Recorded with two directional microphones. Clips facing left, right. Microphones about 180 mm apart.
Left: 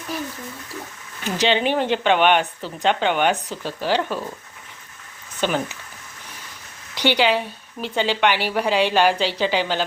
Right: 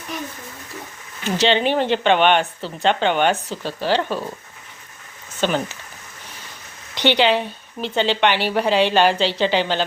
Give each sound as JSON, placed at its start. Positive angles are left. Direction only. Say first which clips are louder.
{"t": 1.4, "sound": "a woman's voice", "louder": "right 2 dB", "side_deg": 10}
{"t": 5.4, "sound": "speech", "louder": "right 1 dB", "side_deg": 10}
{"t": 6.9, "sound": "a woman's voice", "louder": "right 2 dB", "side_deg": 10}